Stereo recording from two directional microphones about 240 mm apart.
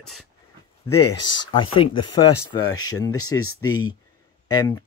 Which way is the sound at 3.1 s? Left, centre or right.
Left.